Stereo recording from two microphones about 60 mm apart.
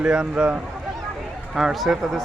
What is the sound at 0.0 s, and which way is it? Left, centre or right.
Speech, centre.